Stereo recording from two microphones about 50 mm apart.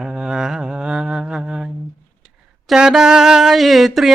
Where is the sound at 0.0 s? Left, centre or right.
Centre.